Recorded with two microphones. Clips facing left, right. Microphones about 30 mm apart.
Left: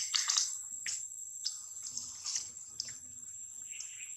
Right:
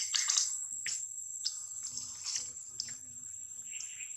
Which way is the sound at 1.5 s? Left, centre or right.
Centre.